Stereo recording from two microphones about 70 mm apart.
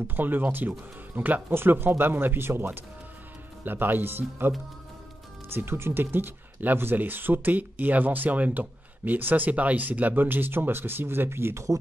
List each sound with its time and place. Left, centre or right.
0.1 s speech: right
5.5 s speech: right